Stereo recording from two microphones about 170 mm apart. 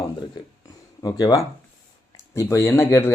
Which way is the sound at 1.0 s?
25° left (ahead or behind).